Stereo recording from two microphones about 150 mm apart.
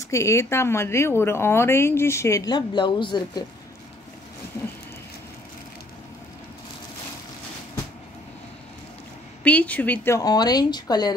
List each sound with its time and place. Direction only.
0.1 s a woman's voice: 20° left (ahead or behind)
9.4 s a woman's voice: 10° left (ahead or behind); by 11.1 s 25° left (ahead or behind)